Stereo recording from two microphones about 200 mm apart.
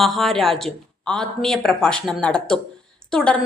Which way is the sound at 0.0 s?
Centre (ahead or behind).